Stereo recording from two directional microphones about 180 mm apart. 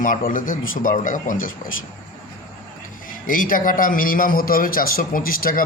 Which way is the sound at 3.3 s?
50° left (ahead or behind).